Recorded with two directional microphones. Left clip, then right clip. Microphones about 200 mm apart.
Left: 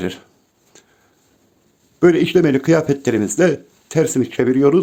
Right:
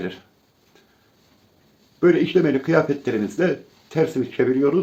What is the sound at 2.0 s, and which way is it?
Speech, 65° left (ahead or behind).